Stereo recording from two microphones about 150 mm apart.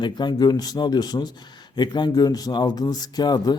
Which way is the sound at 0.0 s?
30° left (ahead or behind).